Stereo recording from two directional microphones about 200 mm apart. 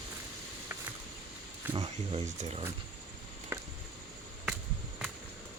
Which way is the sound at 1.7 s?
30° right (ahead or behind).